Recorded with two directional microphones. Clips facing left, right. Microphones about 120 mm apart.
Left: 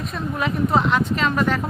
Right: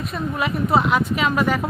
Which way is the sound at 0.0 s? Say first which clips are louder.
Right 1 dB; 5° right (ahead or behind).